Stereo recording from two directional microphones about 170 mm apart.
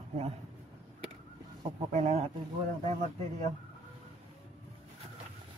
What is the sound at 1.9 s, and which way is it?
Speech, 40° right (ahead or behind).